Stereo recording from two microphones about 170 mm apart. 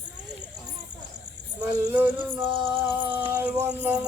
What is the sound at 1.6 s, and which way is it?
Music, 5° right (ahead or behind).